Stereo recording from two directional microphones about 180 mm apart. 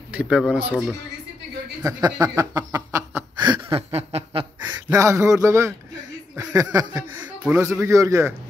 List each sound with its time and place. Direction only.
0.1 s speech: 5° right (ahead or behind)
1.8 s a sound: 20° right (ahead or behind)
2.3 s snicker: 20° right (ahead or behind)
4.6 s speech: 15° right (ahead or behind)
6.5 s a sound: 20° right (ahead or behind)
7.4 s a man's voice: 10° right (ahead or behind)